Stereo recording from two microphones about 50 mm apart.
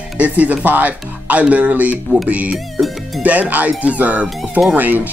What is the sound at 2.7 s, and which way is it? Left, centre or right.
Music, centre.